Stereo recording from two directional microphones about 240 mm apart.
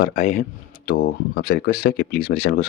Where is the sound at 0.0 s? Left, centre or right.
Left.